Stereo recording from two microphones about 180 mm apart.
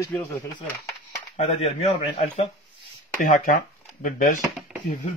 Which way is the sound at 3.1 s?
50° left (ahead or behind).